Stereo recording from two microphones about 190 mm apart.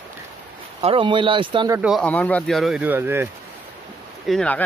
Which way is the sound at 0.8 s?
30° right (ahead or behind).